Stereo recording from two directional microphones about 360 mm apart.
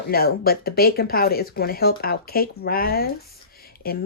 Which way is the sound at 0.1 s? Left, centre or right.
Left.